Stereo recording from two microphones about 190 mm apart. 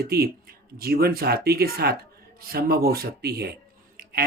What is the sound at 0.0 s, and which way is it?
Speech, 55° right (ahead or behind).